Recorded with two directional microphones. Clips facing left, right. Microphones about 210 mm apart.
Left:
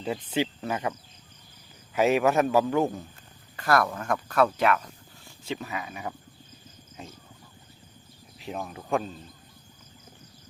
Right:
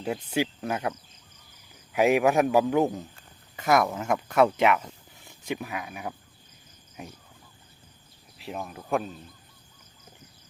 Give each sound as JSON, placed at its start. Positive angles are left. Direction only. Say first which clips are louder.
{"t": 0.0, "sound": "a man's voice", "louder": "even", "side_deg": -10}
{"t": 8.4, "sound": "speech", "louder": "left 1 dB", "side_deg": 0}